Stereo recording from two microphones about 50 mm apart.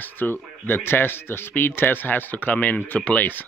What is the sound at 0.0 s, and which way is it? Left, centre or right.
Speech, left.